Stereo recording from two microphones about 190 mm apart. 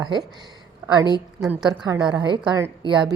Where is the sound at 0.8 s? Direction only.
10° right (ahead or behind).